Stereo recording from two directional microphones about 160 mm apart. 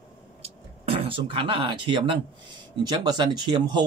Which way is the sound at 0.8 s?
35° right (ahead or behind).